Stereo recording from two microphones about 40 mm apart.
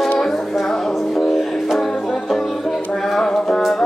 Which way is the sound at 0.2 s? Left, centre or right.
Centre.